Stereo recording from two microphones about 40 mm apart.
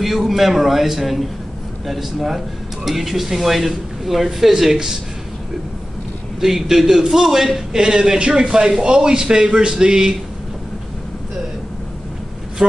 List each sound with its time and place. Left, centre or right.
0.0 s speech: centre
6.4 s a man's voice: centre